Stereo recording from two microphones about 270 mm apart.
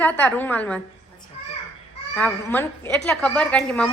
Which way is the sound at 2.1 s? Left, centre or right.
Centre.